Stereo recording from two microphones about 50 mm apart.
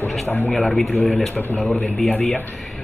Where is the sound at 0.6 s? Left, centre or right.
Centre.